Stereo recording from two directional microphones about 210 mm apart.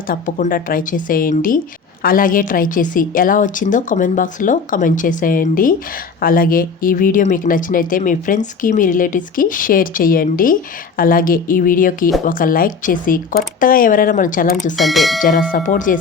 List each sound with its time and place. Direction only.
0.1 s speech: 40° left (ahead or behind)
14.8 s speech: centre (ahead or behind)
15.2 s speech: 40° left (ahead or behind)